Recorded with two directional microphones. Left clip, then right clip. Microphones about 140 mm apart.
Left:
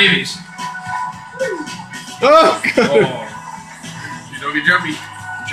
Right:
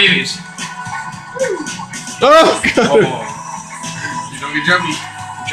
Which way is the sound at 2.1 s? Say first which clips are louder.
Right 2 dB; 25° right (ahead or behind).